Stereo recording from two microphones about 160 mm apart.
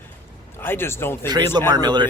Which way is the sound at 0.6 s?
15° left (ahead or behind).